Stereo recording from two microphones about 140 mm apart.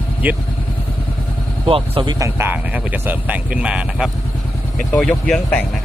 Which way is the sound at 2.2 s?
15° right (ahead or behind).